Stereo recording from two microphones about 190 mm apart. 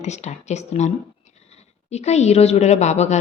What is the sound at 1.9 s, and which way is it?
A woman's voice, 35° left (ahead or behind).